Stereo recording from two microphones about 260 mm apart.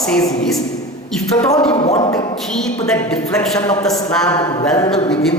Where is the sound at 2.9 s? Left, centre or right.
Centre.